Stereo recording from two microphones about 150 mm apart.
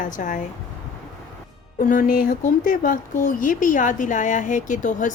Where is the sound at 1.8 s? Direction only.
70° left (ahead or behind).